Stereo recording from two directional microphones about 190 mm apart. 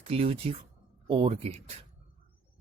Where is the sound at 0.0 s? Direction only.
30° right (ahead or behind).